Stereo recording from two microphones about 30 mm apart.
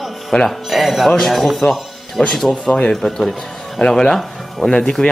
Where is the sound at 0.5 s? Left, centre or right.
Centre.